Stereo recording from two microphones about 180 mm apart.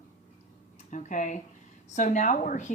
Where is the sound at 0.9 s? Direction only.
45° left (ahead or behind).